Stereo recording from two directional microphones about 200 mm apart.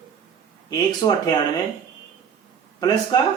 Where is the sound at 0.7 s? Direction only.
20° left (ahead or behind).